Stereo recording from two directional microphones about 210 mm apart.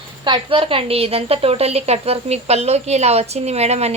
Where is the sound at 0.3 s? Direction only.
25° right (ahead or behind).